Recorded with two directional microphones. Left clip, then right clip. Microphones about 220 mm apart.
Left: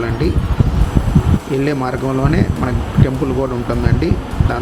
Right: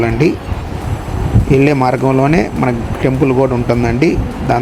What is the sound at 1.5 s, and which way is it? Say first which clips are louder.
Speech: right 8 dB; 20° right (ahead or behind).